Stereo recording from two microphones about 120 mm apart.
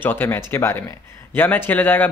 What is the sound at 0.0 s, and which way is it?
Speech, 15° left (ahead or behind).